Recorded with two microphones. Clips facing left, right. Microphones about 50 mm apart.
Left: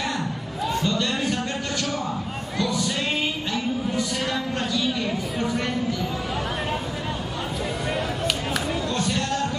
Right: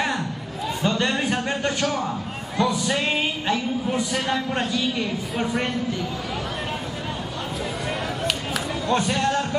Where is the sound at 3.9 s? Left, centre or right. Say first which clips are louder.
Right 2 dB; right.